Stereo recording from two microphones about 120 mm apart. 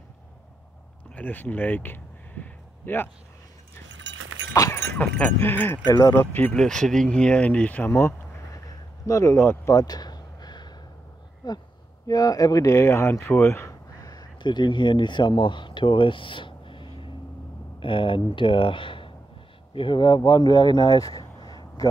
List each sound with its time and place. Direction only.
1.1 s speech: 15° left (ahead or behind)
4.6 s keys jangling: 25° left (ahead or behind)
4.9 s speech: 15° left (ahead or behind)
5.9 s speech: 30° left (ahead or behind)
6.3 s speech: 10° left (ahead or behind)
8.6 s a sound: 25° left (ahead or behind)
9.8 s a sound: 35° left (ahead or behind)
11.4 s speech: 35° left (ahead or behind); by 13.7 s 20° left (ahead or behind)
14.0 s speech: 35° left (ahead or behind)